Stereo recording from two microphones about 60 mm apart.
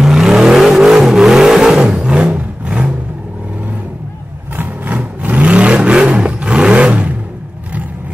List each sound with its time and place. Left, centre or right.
0.0 s vehicle: centre
4.6 s vehicle: right